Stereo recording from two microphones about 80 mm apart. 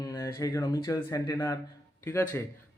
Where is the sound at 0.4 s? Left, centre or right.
Left.